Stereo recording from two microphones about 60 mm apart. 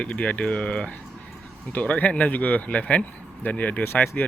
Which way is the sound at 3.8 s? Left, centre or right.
Left.